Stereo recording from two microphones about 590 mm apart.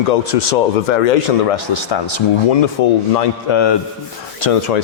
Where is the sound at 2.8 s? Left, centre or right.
Left.